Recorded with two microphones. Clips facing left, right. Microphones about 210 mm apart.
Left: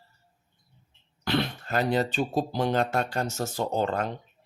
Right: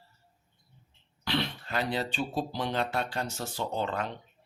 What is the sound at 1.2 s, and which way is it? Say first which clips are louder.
Speech: left 4 dB; 45° left (ahead or behind).